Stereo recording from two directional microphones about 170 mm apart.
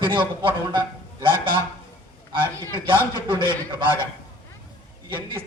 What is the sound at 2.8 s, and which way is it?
Speech, 30° right (ahead or behind).